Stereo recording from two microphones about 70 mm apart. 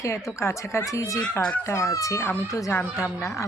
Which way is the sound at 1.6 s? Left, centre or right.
Left.